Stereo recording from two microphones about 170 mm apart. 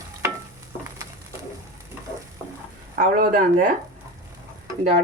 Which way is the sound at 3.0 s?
55° right (ahead or behind).